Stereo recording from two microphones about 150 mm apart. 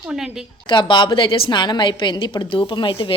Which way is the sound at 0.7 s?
30° left (ahead or behind).